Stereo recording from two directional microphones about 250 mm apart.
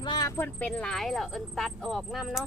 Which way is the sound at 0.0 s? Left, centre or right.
Centre.